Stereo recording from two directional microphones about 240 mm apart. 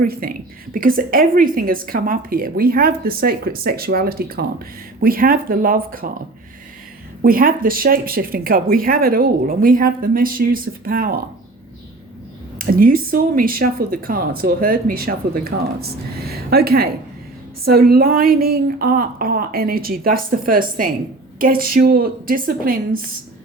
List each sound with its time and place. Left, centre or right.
0.0 s a woman's voice: right
7.2 s a woman's voice: right
12.5 s a woman's voice: right